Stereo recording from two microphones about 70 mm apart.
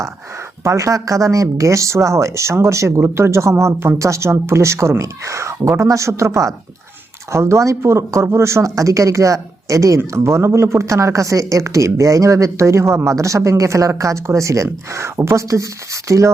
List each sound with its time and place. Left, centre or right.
0.6 s speech: right
10.0 s speech: right